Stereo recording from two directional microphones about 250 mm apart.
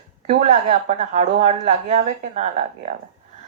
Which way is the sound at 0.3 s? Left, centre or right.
Right.